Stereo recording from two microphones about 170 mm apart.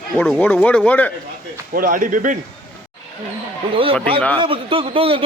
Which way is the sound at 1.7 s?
55° right (ahead or behind).